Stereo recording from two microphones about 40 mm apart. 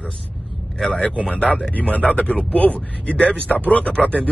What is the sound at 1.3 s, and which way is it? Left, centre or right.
Speech, left.